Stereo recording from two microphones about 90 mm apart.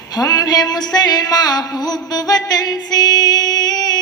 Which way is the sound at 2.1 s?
45° left (ahead or behind).